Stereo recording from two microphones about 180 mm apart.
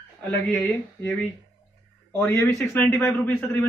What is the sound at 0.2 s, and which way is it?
Speech, 10° left (ahead or behind).